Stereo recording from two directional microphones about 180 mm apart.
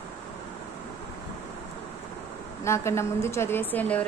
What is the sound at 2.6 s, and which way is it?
A woman's voice, 15° left (ahead or behind).